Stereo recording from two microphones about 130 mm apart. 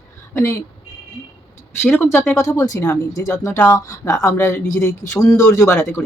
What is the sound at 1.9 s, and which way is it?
Speech, 15° left (ahead or behind).